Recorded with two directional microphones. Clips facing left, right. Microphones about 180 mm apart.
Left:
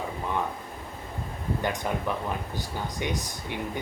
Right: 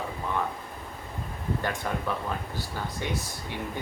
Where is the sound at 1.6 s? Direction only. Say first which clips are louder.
Left 3 dB; 15° left (ahead or behind).